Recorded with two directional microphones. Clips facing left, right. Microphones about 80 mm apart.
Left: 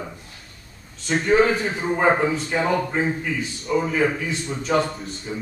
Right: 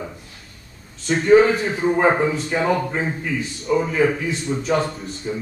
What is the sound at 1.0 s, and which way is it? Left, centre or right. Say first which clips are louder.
Speech: right 4 dB; centre.